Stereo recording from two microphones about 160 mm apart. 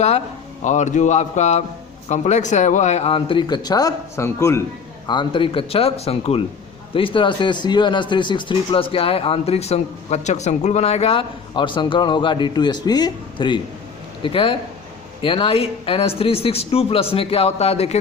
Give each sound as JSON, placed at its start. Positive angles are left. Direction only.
{"t": 0.6, "sound": "speech", "side_deg": 45}
{"t": 5.0, "sound": "a man's voice", "side_deg": 30}